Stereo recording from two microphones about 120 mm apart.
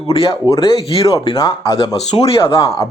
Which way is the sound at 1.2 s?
35° left (ahead or behind).